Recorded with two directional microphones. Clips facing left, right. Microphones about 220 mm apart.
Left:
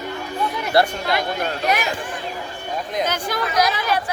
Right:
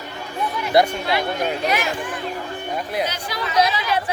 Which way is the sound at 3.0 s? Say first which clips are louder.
Left 3 dB; 50° left (ahead or behind).